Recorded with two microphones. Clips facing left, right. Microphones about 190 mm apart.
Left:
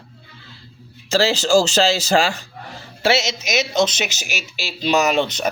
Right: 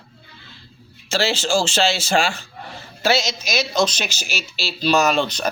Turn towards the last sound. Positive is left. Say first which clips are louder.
# left 1 dB
turn(degrees=20)  # may be behind; listen again after turning